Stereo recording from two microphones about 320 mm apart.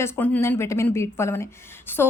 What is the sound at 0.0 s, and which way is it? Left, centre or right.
A woman's voice, centre.